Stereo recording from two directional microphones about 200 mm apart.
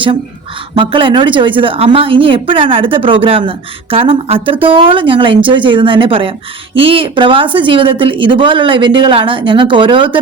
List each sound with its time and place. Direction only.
0.8 s a woman's voice: 25° right (ahead or behind)